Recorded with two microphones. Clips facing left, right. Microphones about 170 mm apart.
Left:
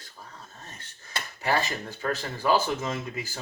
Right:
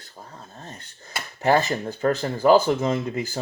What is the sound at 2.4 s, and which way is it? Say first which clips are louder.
Speech: right 8 dB; 35° right (ahead or behind).